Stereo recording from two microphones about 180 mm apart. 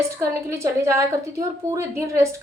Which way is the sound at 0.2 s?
15° right (ahead or behind).